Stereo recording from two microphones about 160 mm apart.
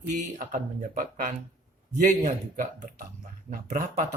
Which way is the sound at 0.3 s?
50° right (ahead or behind).